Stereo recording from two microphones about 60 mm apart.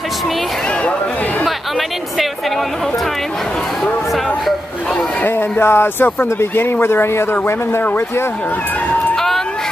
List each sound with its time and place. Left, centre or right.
5.6 s speech: left
9.1 s vehicle: centre